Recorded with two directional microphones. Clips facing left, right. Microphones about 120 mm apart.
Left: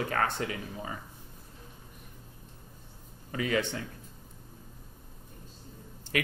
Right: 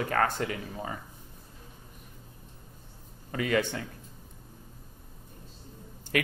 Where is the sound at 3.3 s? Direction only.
55° right (ahead or behind).